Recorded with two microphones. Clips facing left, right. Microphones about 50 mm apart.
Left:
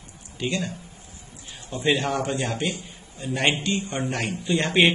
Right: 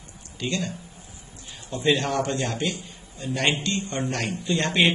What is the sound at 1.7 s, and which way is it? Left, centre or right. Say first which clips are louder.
A man's voice: even; centre.